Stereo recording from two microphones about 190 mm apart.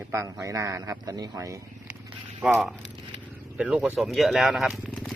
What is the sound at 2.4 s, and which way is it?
Speech, 5° right (ahead or behind).